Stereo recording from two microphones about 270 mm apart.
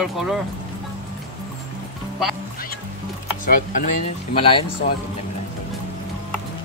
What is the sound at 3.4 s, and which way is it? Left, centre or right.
Speech, left.